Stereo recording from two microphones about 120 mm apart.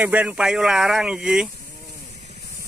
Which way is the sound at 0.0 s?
10° right (ahead or behind).